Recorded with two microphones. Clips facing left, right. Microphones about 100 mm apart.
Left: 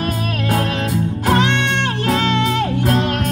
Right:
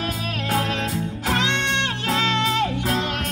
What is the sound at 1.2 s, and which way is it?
Music, 55° left (ahead or behind).